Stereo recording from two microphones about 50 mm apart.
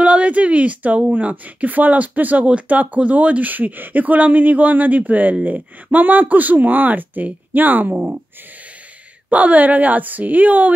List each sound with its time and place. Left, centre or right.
0.0 s a sound: right
1.1 s speech: right
9.3 s speech: right